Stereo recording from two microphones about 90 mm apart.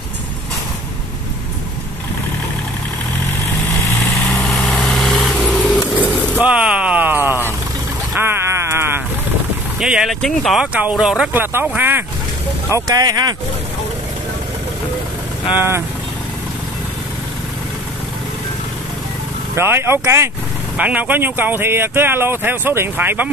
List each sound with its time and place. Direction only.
4.3 s lawn mower: 5° left (ahead or behind)
6.4 s a sound: 15° right (ahead or behind)
9.8 s speech: 5° right (ahead or behind)
10.6 s speech: 10° right (ahead or behind)
11.3 s speech: 20° right (ahead or behind)
12.8 s speech: 50° right (ahead or behind)
15.5 s speech: 25° right (ahead or behind)
19.5 s speech: 25° right (ahead or behind)
20.7 s speech: 15° right (ahead or behind)